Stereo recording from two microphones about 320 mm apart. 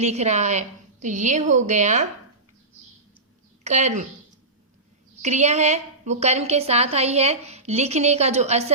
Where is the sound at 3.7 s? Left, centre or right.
Right.